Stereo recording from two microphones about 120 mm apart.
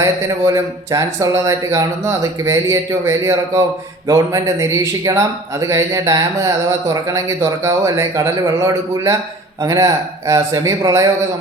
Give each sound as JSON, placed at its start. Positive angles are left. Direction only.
{"t": 0.0, "sound": "speech", "side_deg": -25}